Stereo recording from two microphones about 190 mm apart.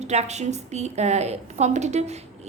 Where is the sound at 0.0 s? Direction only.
35° right (ahead or behind).